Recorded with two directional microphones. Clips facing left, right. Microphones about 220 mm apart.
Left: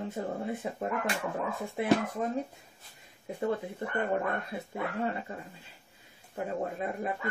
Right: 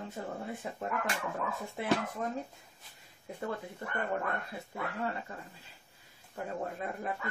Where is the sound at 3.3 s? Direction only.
20° left (ahead or behind).